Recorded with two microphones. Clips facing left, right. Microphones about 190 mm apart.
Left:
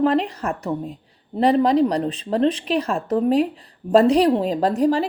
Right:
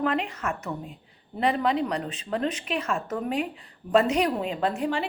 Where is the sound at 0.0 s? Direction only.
35° left (ahead or behind).